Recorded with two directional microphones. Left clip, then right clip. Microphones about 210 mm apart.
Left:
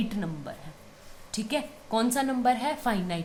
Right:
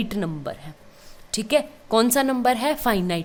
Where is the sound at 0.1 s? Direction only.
50° right (ahead or behind).